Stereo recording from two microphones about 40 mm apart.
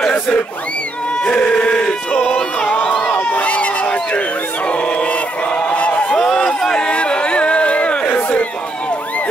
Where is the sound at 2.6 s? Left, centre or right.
Left.